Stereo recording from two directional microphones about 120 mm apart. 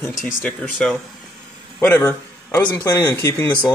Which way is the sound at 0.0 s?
Centre (ahead or behind).